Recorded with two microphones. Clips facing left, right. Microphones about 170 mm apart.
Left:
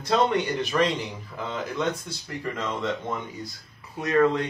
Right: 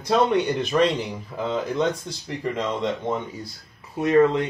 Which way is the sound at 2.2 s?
20° right (ahead or behind).